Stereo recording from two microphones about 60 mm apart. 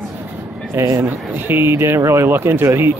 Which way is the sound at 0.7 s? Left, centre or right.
Right.